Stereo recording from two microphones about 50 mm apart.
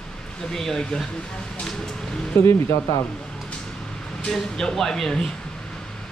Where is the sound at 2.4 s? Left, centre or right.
Left.